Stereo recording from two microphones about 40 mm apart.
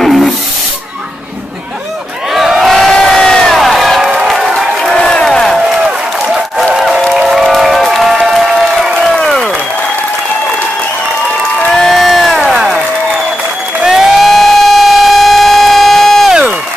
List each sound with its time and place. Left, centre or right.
0.0 s a sound: centre
2.3 s crowd: centre
2.7 s crowd: centre
3.5 s crowd: centre
4.1 s crowd: centre
4.6 s crowd: centre
6.7 s applause: centre
11.7 s crowd: centre
13.8 s siren: centre
16.3 s a sound: centre